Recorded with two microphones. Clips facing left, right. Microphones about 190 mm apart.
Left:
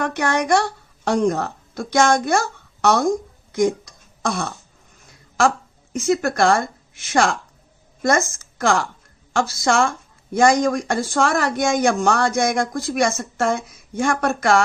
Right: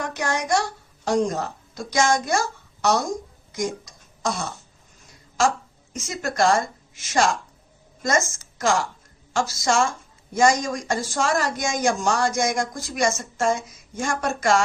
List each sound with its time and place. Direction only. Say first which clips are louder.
0.0 s a woman's voice: left 5 dB; 60° left (ahead or behind)
5.9 s speech: left 10 dB; 60° left (ahead or behind)
8.5 s speech: left 3 dB; 60° left (ahead or behind)